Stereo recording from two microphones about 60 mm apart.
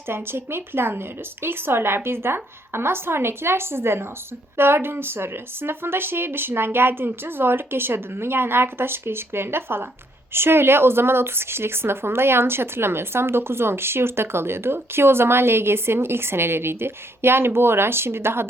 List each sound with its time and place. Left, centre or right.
0.1 s speech: right